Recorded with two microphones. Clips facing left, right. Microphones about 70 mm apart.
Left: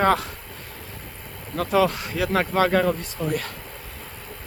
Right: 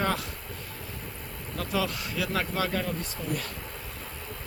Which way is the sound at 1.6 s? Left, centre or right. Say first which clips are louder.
Left 10 dB; left.